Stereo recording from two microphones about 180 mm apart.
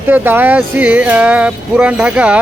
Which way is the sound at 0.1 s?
10° right (ahead or behind).